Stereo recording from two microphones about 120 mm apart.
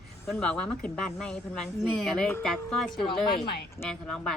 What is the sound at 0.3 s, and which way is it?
A woman's voice, 5° left (ahead or behind).